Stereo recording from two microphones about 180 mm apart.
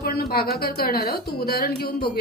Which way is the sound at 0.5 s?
60° left (ahead or behind).